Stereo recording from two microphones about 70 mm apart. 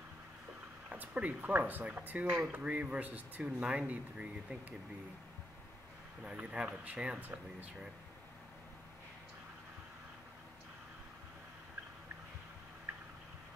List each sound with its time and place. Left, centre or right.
0.8 s speech: centre
6.2 s speech: centre